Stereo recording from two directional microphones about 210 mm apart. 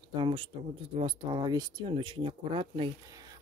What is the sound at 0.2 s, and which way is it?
Speech, 25° right (ahead or behind).